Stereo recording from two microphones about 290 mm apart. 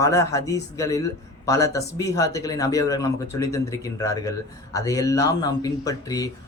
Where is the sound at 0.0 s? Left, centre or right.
Centre.